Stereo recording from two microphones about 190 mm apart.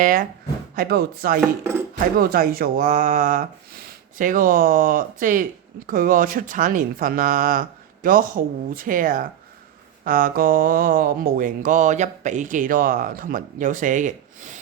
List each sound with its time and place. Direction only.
0.0 s speech: 45° right (ahead or behind)